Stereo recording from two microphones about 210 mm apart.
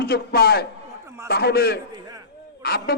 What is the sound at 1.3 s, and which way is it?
Speech, 50° left (ahead or behind).